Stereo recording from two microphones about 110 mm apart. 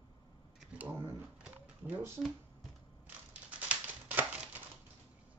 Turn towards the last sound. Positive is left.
turn(degrees=-15)  # may be behind; listen again after turning